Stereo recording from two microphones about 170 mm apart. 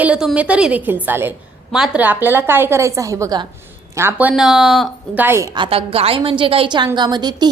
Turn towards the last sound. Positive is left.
turn(degrees=-25)  # may be behind; listen again after turning